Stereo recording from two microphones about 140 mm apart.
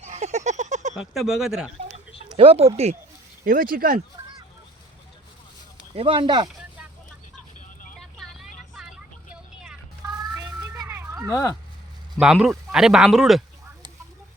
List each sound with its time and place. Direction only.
0.0 s a sound: 55° right (ahead or behind)
0.9 s speech: centre (ahead or behind)
2.3 s speech: 40° right (ahead or behind)
3.4 s speech: 80° right
5.9 s speech: 40° right (ahead or behind)
7.9 s vehicle: centre (ahead or behind)
10.1 s a sound: 25° right (ahead or behind)
12.2 s speech: 5° right (ahead or behind)